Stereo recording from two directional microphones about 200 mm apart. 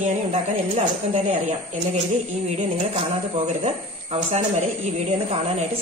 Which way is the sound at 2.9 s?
35° right (ahead or behind).